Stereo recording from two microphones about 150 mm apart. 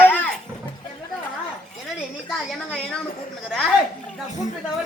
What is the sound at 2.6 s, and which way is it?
Speech, 5° left (ahead or behind).